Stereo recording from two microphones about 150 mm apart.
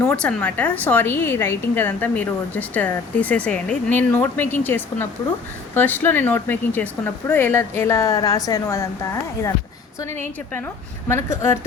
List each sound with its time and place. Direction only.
0.0 s a woman's voice: 10° left (ahead or behind)
10.0 s a woman's voice: 15° left (ahead or behind)